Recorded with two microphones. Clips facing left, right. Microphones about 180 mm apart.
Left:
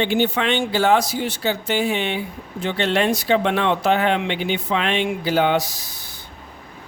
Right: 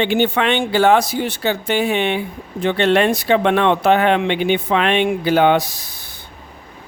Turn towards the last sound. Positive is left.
turn(degrees=-60)  # may be behind; listen again after turning